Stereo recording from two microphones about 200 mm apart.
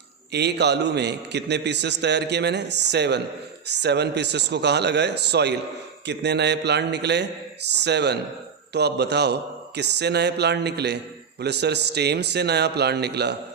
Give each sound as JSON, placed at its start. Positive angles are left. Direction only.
{"t": 0.3, "sound": "a man's voice", "side_deg": -55}